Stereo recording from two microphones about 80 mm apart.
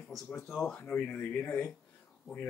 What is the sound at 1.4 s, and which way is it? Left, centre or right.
Speech, left.